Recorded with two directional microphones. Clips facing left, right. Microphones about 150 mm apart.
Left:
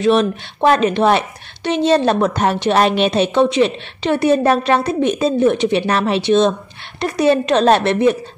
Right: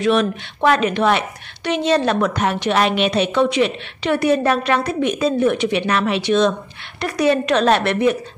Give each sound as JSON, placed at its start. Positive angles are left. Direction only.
{"t": 0.0, "sound": "a woman's voice", "side_deg": 30}